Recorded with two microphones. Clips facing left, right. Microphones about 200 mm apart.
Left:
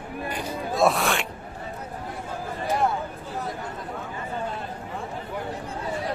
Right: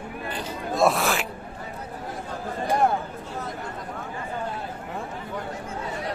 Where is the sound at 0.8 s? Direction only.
Centre (ahead or behind).